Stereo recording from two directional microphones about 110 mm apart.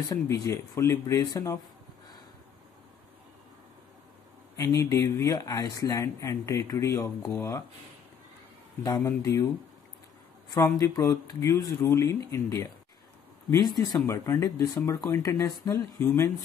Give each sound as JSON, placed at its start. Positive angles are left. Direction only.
{"t": 0.1, "sound": "speech", "side_deg": 30}
{"t": 4.6, "sound": "speech", "side_deg": 30}
{"t": 8.8, "sound": "speech", "side_deg": 30}
{"t": 10.5, "sound": "speech", "side_deg": 30}
{"t": 13.7, "sound": "speech", "side_deg": 30}